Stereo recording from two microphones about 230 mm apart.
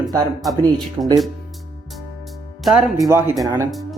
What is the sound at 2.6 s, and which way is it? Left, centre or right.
A woman's voice, centre.